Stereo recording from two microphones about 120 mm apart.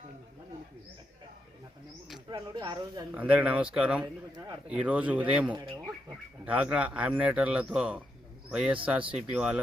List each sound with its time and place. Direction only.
2.3 s speech: 40° right (ahead or behind)
3.2 s speech: 15° right (ahead or behind)